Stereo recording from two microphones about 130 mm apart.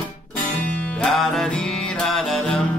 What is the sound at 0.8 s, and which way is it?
Music, 5° left (ahead or behind).